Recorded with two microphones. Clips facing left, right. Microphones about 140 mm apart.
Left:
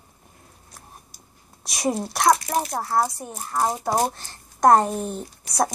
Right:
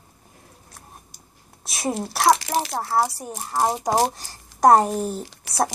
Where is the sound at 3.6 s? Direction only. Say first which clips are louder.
Right 2 dB; 15° right (ahead or behind).